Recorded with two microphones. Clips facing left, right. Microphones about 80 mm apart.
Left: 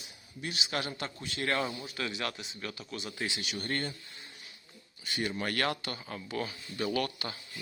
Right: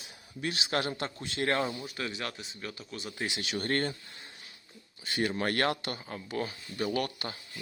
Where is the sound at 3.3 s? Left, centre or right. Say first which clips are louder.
Right 1 dB; right.